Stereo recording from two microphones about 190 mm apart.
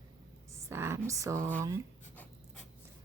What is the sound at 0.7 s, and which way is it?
Speech, 15° right (ahead or behind).